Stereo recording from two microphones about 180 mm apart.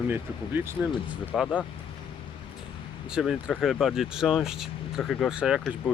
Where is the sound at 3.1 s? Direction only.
5° right (ahead or behind).